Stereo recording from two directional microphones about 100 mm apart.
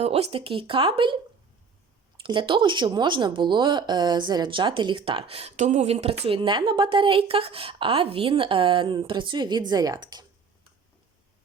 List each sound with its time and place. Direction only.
0.0 s a woman's voice: 85° right; by 5.0 s 50° right (ahead or behind)
5.0 s a woman's voice: 65° right (ahead or behind); by 10.2 s 45° right (ahead or behind)